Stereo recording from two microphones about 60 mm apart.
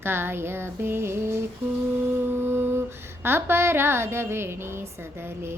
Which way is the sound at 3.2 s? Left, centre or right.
Right.